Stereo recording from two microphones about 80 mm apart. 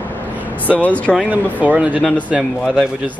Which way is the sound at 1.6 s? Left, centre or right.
Centre.